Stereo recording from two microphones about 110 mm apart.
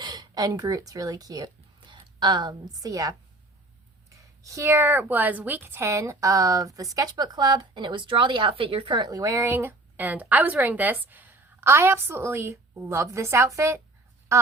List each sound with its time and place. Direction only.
0.0 s speech: 35° right (ahead or behind)
1.9 s a woman's voice: 45° right (ahead or behind)
4.2 s a woman's voice: 30° right (ahead or behind); by 9.1 s 45° right (ahead or behind)
9.1 s a woman's voice: 30° right (ahead or behind)